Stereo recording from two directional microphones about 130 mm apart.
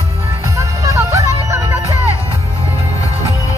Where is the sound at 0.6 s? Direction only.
25° right (ahead or behind).